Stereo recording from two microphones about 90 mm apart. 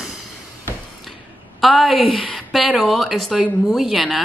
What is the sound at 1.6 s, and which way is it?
Speech, centre (ahead or behind).